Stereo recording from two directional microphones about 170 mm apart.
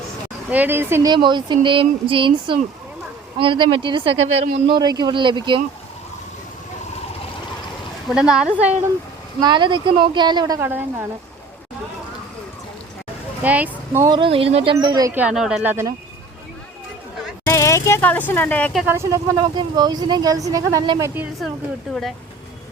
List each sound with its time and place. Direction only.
0.5 s speech: 10° right (ahead or behind)
1.1 s speech: 25° right (ahead or behind)
8.1 s speech: 5° right (ahead or behind)
9.4 s speech: 30° right (ahead or behind); by 11.0 s 10° right (ahead or behind)
13.4 s speech: 10° right (ahead or behind); by 14.7 s 35° right (ahead or behind)
14.8 s speech: 25° right (ahead or behind)
15.1 s speech: 5° right (ahead or behind)
17.4 s speech: 15° left (ahead or behind)
18.9 s speech: 15° right (ahead or behind)
21.2 s speech: centre (ahead or behind)